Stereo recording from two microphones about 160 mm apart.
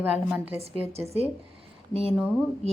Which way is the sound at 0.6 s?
40° right (ahead or behind).